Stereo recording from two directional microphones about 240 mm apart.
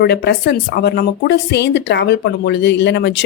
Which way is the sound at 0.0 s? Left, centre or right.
Left.